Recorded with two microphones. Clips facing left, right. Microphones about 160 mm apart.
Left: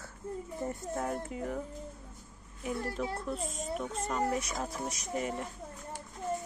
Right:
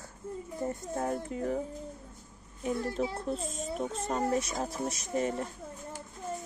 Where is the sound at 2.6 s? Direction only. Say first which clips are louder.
Right 3 dB; 30° right (ahead or behind).